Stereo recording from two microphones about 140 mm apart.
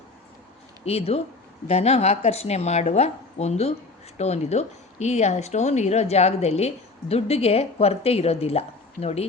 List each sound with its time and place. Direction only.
0.9 s speech: 45° left (ahead or behind)